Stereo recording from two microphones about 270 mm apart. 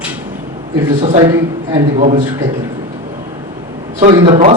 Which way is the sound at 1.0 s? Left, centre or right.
Right.